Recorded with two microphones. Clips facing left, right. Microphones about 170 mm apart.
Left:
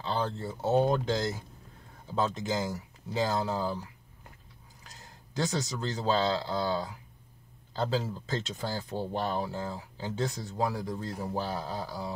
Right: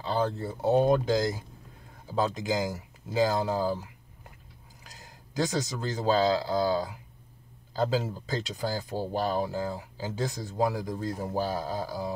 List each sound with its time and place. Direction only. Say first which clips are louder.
0.0 s a sound: right 3 dB; centre (ahead or behind)
0.6 s speech: right 3 dB; centre (ahead or behind)
5.0 s speech: right 3 dB; centre (ahead or behind)